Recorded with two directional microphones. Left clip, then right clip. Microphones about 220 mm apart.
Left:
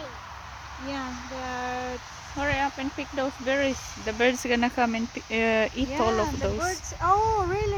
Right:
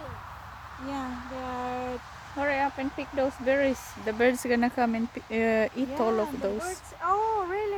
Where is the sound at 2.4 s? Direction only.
15° right (ahead or behind).